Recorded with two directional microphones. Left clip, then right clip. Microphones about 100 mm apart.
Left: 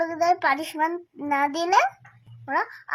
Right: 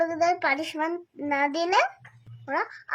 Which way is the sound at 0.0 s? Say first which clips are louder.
Left 2 dB; centre (ahead or behind).